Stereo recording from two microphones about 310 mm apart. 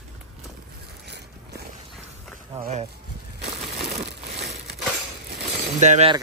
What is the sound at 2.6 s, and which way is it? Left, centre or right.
Speech, right.